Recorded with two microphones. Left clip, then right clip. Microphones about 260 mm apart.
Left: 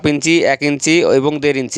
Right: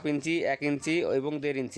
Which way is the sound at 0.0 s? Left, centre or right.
Left.